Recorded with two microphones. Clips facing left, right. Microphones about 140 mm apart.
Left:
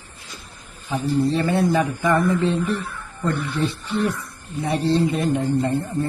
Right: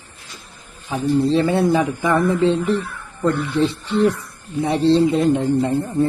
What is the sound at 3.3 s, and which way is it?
Speech, 25° right (ahead or behind).